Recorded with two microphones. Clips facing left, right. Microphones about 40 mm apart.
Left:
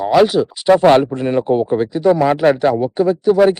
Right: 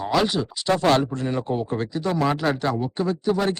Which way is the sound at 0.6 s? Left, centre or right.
Left.